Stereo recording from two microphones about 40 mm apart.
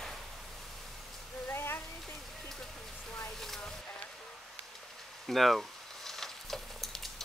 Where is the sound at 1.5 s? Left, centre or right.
Left.